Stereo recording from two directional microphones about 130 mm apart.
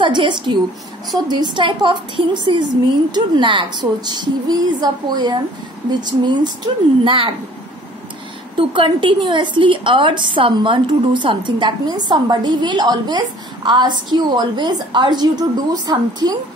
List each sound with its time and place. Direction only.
0.0 s a woman's voice: 40° right (ahead or behind)
8.7 s a woman's voice: 40° right (ahead or behind)